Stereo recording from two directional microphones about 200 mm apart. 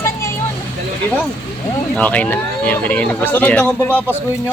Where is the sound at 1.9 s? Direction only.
5° left (ahead or behind).